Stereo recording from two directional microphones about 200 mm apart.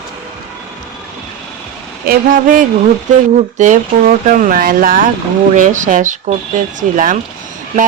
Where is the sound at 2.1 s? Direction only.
40° right (ahead or behind).